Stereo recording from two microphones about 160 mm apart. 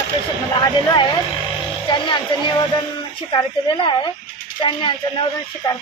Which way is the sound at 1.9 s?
30° left (ahead or behind).